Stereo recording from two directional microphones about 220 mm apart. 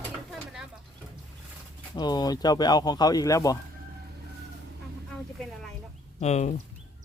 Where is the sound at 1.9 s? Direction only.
20° left (ahead or behind).